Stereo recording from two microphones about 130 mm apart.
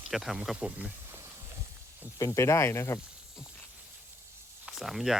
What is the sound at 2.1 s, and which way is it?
Speech, 25° left (ahead or behind).